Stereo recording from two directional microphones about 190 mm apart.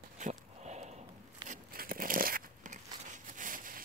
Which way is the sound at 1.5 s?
50° right (ahead or behind).